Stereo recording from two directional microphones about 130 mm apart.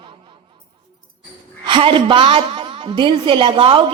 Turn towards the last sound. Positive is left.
turn(degrees=-45)  # may be behind; listen again after turning